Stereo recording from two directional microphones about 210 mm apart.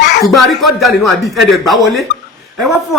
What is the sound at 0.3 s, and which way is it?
Speech, centre (ahead or behind).